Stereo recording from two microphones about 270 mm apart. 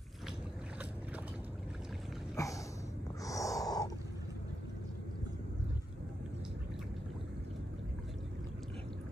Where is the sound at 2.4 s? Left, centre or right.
Centre.